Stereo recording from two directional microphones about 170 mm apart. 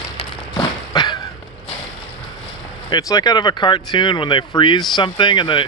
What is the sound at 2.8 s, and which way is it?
Speech, 25° left (ahead or behind).